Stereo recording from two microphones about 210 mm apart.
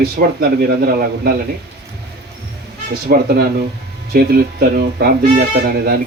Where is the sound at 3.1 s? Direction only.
45° right (ahead or behind).